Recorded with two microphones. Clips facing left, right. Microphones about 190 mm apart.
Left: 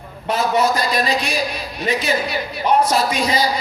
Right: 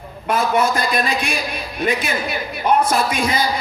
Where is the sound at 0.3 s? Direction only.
50° right (ahead or behind).